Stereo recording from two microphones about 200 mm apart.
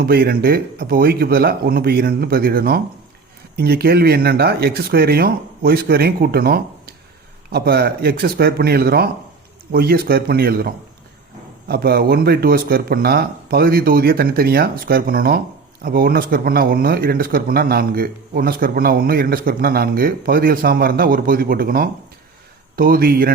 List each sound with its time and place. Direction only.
0.0 s a man's voice: 50° right (ahead or behind)